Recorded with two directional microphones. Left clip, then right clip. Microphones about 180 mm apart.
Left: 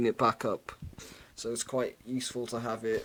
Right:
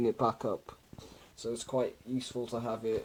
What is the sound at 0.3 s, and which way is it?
Speech, 30° left (ahead or behind).